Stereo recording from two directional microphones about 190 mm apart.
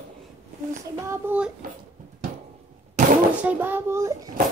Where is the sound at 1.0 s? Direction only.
10° right (ahead or behind).